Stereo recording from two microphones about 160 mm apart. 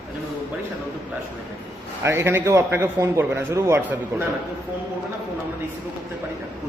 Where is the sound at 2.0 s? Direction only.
15° right (ahead or behind).